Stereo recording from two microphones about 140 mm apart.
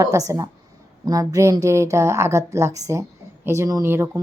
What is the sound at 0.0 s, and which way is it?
Speech, 25° right (ahead or behind).